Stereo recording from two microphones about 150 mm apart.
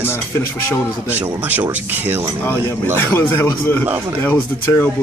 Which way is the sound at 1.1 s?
10° right (ahead or behind).